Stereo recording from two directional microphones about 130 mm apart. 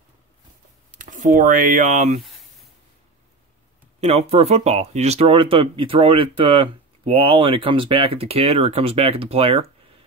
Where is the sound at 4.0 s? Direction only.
55° right (ahead or behind).